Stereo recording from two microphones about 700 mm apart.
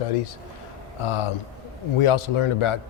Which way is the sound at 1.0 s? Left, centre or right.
Left.